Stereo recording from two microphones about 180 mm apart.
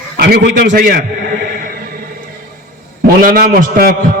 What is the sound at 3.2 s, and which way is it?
Speech, 50° right (ahead or behind).